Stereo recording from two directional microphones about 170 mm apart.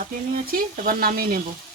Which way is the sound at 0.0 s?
55° right (ahead or behind).